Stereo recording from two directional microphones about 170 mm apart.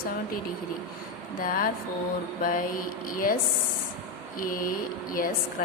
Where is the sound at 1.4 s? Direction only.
55° left (ahead or behind).